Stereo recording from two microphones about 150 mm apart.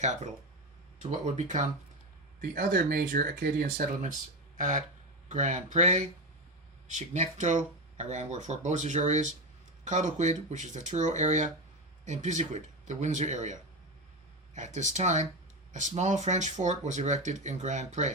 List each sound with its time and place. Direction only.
0.0 s speech: 50° right (ahead or behind)
2.4 s speech: 75° right (ahead or behind)
4.5 s speech: 55° right (ahead or behind)